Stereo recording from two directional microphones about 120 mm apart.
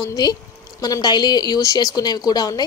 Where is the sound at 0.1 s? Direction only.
30° left (ahead or behind).